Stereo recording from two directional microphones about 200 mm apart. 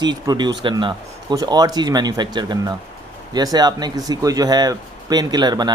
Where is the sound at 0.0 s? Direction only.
20° right (ahead or behind).